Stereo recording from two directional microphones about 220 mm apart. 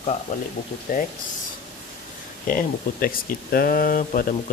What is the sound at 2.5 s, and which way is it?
Speech, 40° left (ahead or behind).